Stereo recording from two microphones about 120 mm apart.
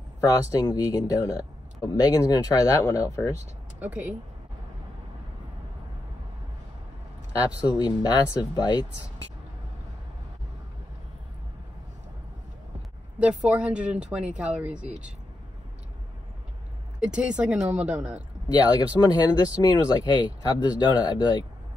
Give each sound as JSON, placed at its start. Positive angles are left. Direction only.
{"t": 0.2, "sound": "speech", "side_deg": 30}
{"t": 3.8, "sound": "speech", "side_deg": -15}
{"t": 7.4, "sound": "speech", "side_deg": 35}
{"t": 13.5, "sound": "speech", "side_deg": -10}
{"t": 17.0, "sound": "speech", "side_deg": -10}
{"t": 18.5, "sound": "speech", "side_deg": 35}